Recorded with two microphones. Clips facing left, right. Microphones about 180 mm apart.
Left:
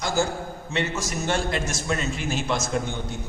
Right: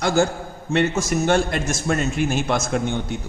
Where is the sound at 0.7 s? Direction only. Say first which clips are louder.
Right 8 dB; 55° right (ahead or behind).